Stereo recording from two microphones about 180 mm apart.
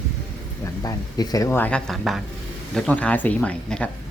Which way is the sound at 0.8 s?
20° left (ahead or behind).